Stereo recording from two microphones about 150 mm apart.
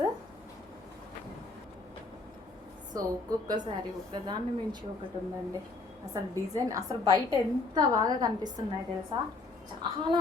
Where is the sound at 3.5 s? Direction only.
30° right (ahead or behind).